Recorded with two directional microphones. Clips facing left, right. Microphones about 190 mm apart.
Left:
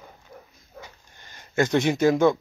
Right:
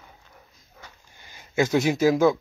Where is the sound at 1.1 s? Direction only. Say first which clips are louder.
Even; 10° right (ahead or behind).